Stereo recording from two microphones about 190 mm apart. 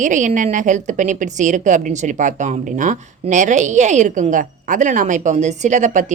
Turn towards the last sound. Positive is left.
turn(degrees=-40)  # may be behind; listen again after turning